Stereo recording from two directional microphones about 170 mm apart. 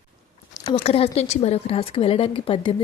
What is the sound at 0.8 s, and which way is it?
A woman's voice, 35° left (ahead or behind).